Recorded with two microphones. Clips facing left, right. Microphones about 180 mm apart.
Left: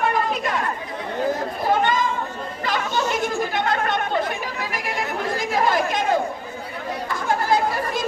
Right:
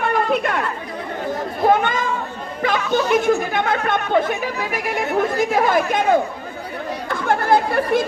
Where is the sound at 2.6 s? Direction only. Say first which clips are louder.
Right 6 dB; 55° right (ahead or behind).